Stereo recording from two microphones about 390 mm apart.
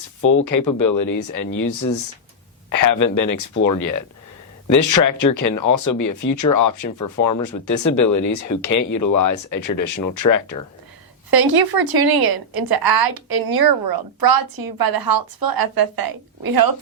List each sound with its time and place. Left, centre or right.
0.4 s speech: left
11.3 s a woman's voice: right